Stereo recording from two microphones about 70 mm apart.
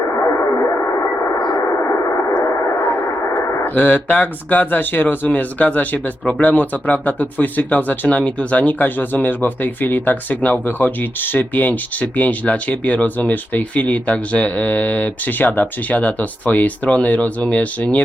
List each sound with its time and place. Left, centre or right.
0.2 s radio: left
1.4 s a sound: left
2.7 s speech: left